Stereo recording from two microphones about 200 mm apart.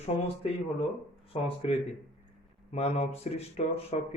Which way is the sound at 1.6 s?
30° left (ahead or behind).